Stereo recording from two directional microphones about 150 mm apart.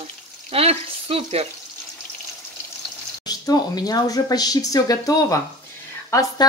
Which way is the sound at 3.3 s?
25° left (ahead or behind).